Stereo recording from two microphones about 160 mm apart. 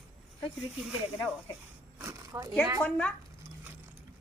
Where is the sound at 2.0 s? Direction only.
15° right (ahead or behind).